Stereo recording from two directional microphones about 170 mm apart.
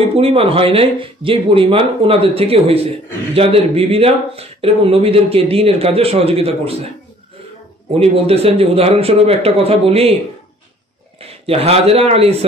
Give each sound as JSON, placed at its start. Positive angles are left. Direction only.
{"t": 0.1, "sound": "speech", "side_deg": -35}
{"t": 8.0, "sound": "speech", "side_deg": -35}
{"t": 11.1, "sound": "speech", "side_deg": -35}